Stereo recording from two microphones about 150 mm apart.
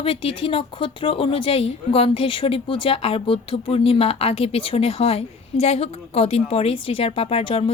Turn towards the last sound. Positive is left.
turn(degrees=40)  # may be behind; listen again after turning